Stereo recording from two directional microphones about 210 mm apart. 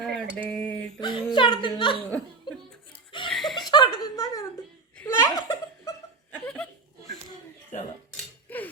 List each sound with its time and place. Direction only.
0.0 s a sound: centre (ahead or behind)
0.9 s speech: 20° left (ahead or behind)
2.0 s laughter: 5° left (ahead or behind)
3.2 s chuckle: centre (ahead or behind)
3.7 s a sound: 20° left (ahead or behind)
4.9 s laughter: 15° left (ahead or behind)
5.4 s giggle: 15° left (ahead or behind)
6.3 s chuckle: 5° left (ahead or behind)
8.1 s a sound: 10° left (ahead or behind)